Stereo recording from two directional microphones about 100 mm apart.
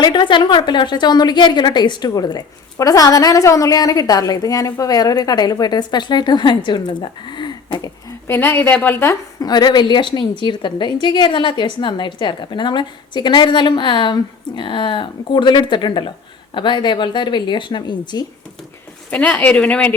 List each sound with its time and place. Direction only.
0.0 s a woman's voice: 50° left (ahead or behind)
8.3 s a woman's voice: 25° left (ahead or behind)
9.4 s a woman's voice: 45° left (ahead or behind)
19.1 s speech: 15° left (ahead or behind)